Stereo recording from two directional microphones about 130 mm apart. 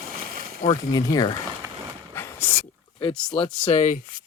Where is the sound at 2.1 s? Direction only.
15° left (ahead or behind).